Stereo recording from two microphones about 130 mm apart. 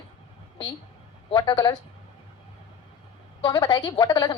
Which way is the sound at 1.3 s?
30° left (ahead or behind).